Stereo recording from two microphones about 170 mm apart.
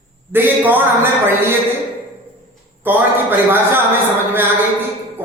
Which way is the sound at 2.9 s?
10° right (ahead or behind).